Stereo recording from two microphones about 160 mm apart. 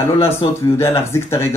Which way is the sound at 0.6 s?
15° left (ahead or behind).